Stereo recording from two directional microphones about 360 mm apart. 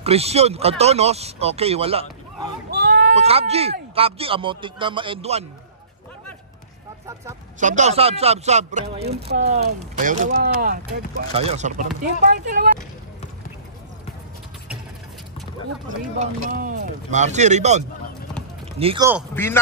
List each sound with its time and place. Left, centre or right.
0.0 s speech: centre
2.7 s a sound: right
3.3 s speech: centre
7.6 s speech: centre
16.2 s speech: right
19.3 s a man's voice: centre